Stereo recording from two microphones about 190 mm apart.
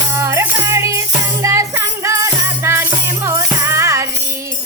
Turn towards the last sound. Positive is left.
turn(degrees=-15)  # may be behind; listen again after turning